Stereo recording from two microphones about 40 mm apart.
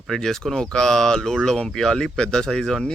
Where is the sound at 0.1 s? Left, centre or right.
Centre.